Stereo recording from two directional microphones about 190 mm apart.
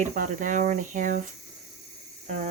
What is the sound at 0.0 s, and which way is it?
Speech, 40° right (ahead or behind).